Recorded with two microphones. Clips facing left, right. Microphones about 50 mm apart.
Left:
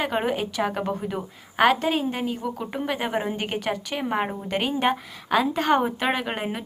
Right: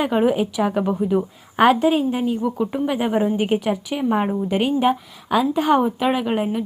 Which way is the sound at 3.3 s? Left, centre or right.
Centre.